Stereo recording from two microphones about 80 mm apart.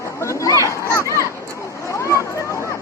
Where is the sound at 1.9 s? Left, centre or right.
Left.